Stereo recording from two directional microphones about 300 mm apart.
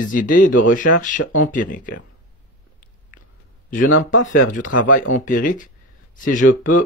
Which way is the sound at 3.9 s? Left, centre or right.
Left.